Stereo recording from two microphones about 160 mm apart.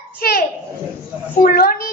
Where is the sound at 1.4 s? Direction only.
65° left (ahead or behind).